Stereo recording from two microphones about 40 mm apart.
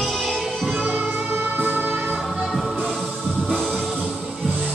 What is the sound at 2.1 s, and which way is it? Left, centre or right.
Music, centre.